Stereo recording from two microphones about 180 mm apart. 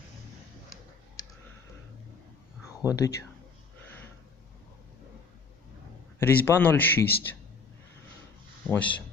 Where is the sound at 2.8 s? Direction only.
20° left (ahead or behind).